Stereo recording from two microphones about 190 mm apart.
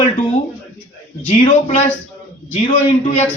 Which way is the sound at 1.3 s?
35° left (ahead or behind).